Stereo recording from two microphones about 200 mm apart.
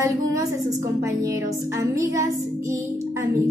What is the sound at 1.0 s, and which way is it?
Music, 15° right (ahead or behind).